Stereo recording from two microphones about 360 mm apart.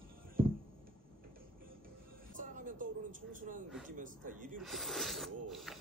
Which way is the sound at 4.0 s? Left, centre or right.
Right.